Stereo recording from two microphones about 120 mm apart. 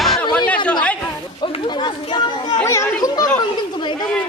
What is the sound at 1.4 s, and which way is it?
Speech, 45° left (ahead or behind).